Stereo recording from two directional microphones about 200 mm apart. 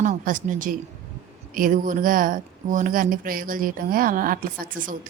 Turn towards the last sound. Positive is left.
turn(degrees=-45)  # may be behind; listen again after turning